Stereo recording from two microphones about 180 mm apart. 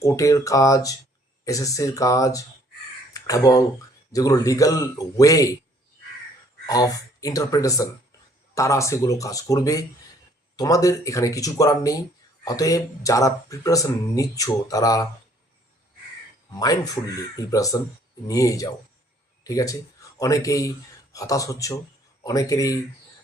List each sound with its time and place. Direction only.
0.0 s speech: 20° left (ahead or behind)
6.7 s speech: 20° left (ahead or behind)
16.6 s speech: 20° left (ahead or behind)